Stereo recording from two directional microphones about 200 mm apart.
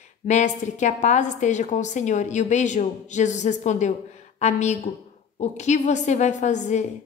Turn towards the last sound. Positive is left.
turn(degrees=35)  # may be behind; listen again after turning